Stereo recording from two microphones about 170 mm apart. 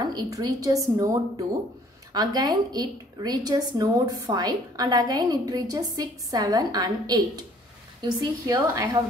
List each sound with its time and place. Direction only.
0.0 s a woman's voice: 20° right (ahead or behind)